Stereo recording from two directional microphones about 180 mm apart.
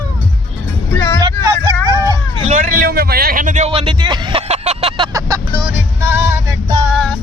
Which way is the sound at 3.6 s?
30° right (ahead or behind).